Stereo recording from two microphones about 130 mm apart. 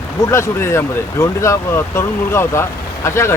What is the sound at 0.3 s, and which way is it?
Speech, 20° left (ahead or behind).